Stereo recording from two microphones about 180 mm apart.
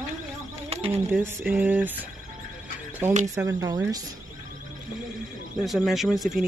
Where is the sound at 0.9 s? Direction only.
10° right (ahead or behind).